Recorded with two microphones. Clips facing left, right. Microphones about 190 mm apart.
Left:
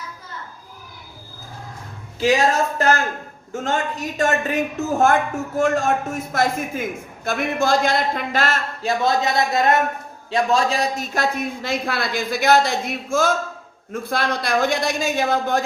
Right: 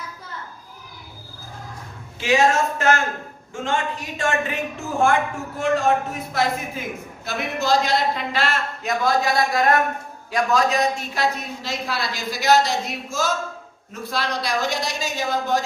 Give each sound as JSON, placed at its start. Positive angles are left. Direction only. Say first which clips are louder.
{"t": 2.2, "sound": "a man's voice", "louder": "left 1 dB", "side_deg": 35}
{"t": 11.1, "sound": "a woman's voice", "louder": "left 2 dB", "side_deg": 50}